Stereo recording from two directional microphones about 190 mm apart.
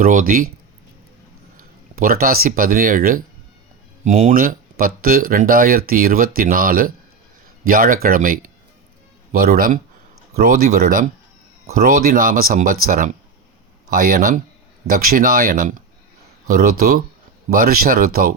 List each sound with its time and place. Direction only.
0.0 s speech: 45° right (ahead or behind)
1.5 s speech: 50° right (ahead or behind)